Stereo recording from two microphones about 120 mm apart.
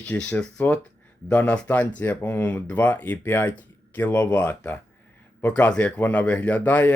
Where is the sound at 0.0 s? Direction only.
10° left (ahead or behind).